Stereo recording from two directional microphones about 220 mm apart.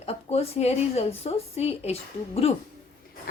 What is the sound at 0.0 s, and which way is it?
A woman's voice, 30° left (ahead or behind).